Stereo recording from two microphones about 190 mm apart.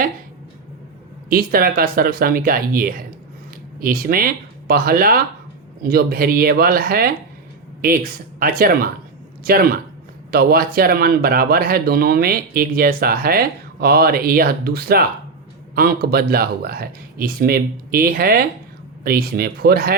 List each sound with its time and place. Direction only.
1.3 s speech: 50° right (ahead or behind)